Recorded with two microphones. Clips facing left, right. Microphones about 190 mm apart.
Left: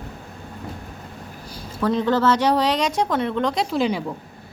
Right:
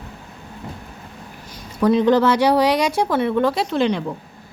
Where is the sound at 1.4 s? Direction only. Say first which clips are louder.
Left 2 dB; 30° left (ahead or behind).